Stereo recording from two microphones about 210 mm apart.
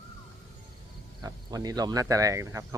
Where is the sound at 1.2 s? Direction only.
15° right (ahead or behind).